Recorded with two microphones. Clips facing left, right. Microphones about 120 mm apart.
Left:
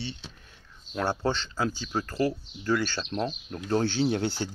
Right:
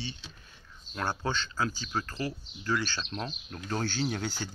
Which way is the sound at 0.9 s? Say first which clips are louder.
Left 5 dB; 30° left (ahead or behind).